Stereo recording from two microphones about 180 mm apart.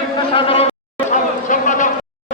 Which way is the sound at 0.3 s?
30° left (ahead or behind).